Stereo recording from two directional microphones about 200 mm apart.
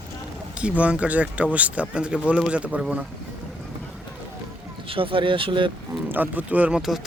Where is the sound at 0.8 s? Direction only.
5° right (ahead or behind).